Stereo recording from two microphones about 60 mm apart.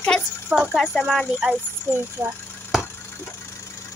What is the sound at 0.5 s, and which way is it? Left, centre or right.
Speech, centre.